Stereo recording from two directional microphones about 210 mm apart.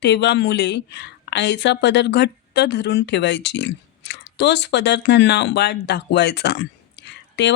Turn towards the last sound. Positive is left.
turn(degrees=55)  # may be behind; listen again after turning